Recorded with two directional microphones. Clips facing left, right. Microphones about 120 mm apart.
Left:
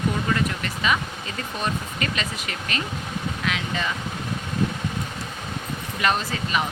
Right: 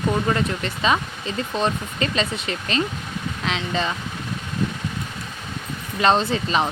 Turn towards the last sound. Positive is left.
turn(degrees=-30)  # may be behind; listen again after turning